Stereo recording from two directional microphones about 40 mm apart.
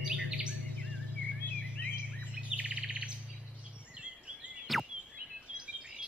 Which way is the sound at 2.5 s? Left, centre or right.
Right.